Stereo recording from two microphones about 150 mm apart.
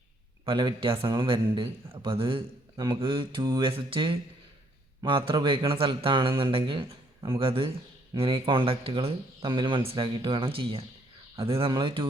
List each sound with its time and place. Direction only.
0.4 s a man's voice: 35° right (ahead or behind)